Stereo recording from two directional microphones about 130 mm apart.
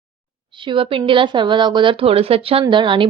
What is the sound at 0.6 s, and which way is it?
A woman's voice, 40° right (ahead or behind).